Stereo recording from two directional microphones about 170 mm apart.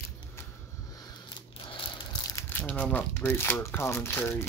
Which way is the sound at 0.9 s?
25° left (ahead or behind).